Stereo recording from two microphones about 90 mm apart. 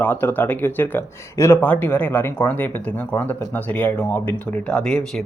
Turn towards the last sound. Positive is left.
turn(degrees=10)  # may be behind; listen again after turning